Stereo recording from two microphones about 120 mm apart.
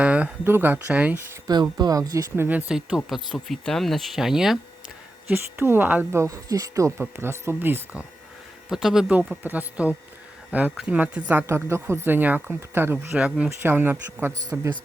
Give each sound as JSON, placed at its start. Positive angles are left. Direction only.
{"t": 0.0, "sound": "speech", "side_deg": -10}
{"t": 1.5, "sound": "speech", "side_deg": -35}
{"t": 2.3, "sound": "speech", "side_deg": -15}
{"t": 5.5, "sound": "speech", "side_deg": -20}
{"t": 8.7, "sound": "a woman's voice", "side_deg": -5}